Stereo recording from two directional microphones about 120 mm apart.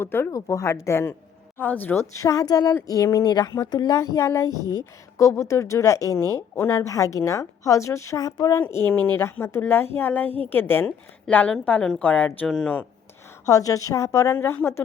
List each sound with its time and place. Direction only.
0.0 s a woman's voice: 20° left (ahead or behind)
2.1 s a woman's voice: 30° left (ahead or behind)
8.6 s a woman's voice: 20° left (ahead or behind)
13.4 s a woman's voice: 30° left (ahead or behind)